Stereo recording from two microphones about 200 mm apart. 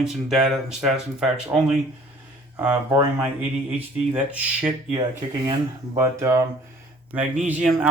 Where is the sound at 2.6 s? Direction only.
15° right (ahead or behind).